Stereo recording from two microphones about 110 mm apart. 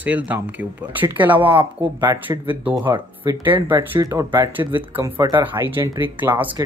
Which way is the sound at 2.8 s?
30° right (ahead or behind).